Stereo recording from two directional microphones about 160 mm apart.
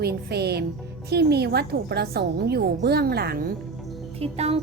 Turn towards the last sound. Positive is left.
turn(degrees=-40)  # may be behind; listen again after turning